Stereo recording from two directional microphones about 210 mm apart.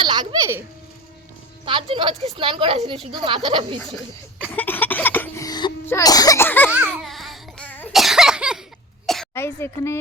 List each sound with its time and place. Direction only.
0.0 s baby laughter: 20° right (ahead or behind)
1.6 s a woman's voice: 25° right (ahead or behind)
3.8 s cough: 5° left (ahead or behind)
5.8 s speech: 15° left (ahead or behind)
6.7 s a sound: 5° right (ahead or behind); by 10.0 s 10° left (ahead or behind)